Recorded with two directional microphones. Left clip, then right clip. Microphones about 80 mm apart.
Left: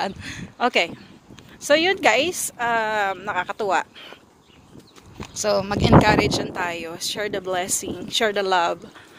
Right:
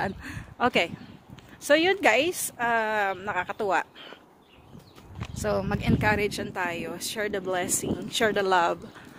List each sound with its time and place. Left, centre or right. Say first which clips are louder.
0.2 s speech: left 3 dB; right
2.0 s speech: left 4 dB; right
3.4 s speech: left 4 dB; centre
5.4 s speech: left 6 dB; right
5.8 s speech: left 13 dB; centre
8.2 s speech: left 3 dB; right
8.5 s speech: left 1 dB; right